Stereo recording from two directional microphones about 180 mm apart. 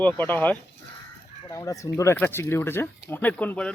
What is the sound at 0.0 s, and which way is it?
Speech, 10° left (ahead or behind).